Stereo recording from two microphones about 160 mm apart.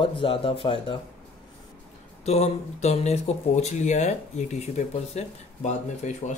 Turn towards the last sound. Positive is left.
turn(degrees=45)  # may be behind; listen again after turning